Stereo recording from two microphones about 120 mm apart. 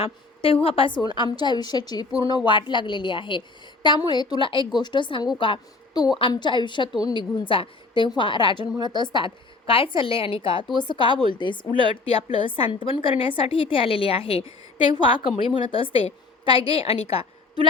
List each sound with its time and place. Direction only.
0.0 s a woman's voice: 50° left (ahead or behind)